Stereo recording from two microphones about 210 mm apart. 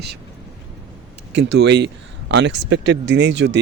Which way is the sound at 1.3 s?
55° right (ahead or behind).